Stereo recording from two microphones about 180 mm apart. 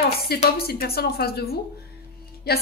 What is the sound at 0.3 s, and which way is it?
A woman's voice, 60° left (ahead or behind).